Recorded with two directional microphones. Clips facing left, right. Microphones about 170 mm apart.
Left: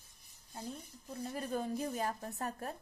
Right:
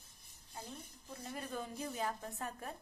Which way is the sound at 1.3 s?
40° left (ahead or behind).